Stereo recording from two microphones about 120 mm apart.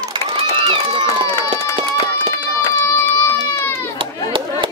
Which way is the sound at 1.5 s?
45° right (ahead or behind).